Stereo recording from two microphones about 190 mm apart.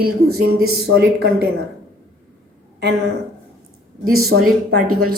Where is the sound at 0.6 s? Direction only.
70° right (ahead or behind).